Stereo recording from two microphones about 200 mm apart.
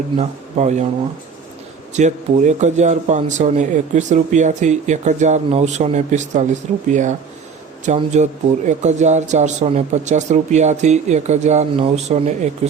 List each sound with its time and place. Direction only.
0.2 s speech: 35° right (ahead or behind)
1.9 s speech: 35° right (ahead or behind)